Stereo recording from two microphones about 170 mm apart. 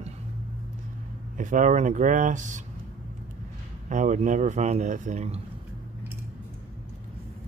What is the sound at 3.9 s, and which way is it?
Speech, 45° right (ahead or behind).